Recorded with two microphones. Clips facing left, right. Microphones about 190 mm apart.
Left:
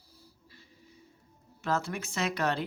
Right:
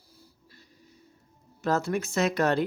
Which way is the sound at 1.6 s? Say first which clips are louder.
Right 5 dB; 40° right (ahead or behind).